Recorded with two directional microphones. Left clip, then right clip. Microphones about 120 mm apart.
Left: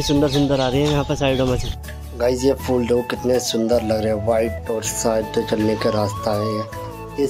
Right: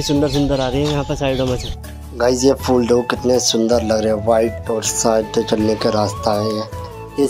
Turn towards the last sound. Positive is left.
turn(degrees=-35)  # may be behind; listen again after turning